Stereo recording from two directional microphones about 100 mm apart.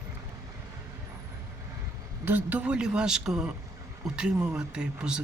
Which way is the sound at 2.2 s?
20° right (ahead or behind).